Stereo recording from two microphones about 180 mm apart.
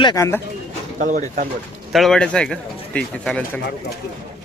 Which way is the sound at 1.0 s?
45° right (ahead or behind).